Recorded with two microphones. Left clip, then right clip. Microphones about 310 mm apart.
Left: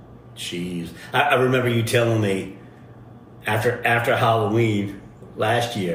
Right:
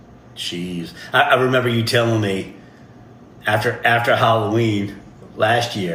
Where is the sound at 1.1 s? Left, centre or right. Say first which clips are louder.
Right 3 dB; right.